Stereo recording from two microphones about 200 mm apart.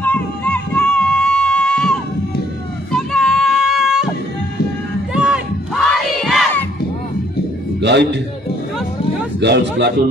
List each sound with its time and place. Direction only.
0.0 s a sound: 10° left (ahead or behind)
2.9 s child singing: centre (ahead or behind)
5.1 s crowd: 5° right (ahead or behind)
7.8 s a man's voice: 60° right (ahead or behind)
9.4 s a man's voice: 55° right (ahead or behind)